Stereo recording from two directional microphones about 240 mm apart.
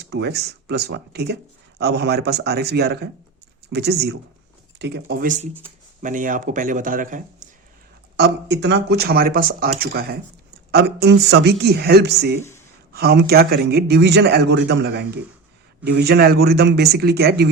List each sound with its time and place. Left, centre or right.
0.0 s a man's voice: right
8.1 s a man's voice: right